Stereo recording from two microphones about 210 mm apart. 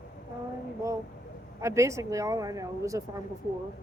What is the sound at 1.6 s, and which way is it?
Speech, 15° right (ahead or behind).